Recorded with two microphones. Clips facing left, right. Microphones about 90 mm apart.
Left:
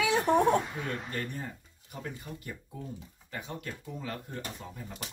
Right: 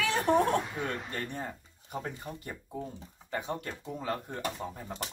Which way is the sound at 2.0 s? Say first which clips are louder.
Right 1 dB; 35° right (ahead or behind).